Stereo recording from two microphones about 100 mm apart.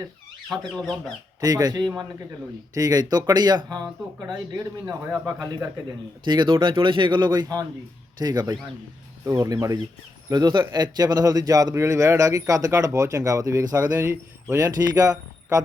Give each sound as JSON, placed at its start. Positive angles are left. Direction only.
{"t": 0.5, "sound": "speech", "side_deg": 0}
{"t": 1.4, "sound": "a man's voice", "side_deg": -40}
{"t": 5.2, "sound": "a man's voice", "side_deg": -35}
{"t": 6.2, "sound": "a man's voice", "side_deg": -50}
{"t": 10.3, "sound": "a man's voice", "side_deg": -50}
{"t": 14.5, "sound": "a man's voice", "side_deg": -40}